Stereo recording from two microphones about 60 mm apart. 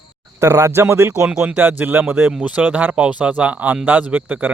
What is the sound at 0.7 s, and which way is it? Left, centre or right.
Speech, right.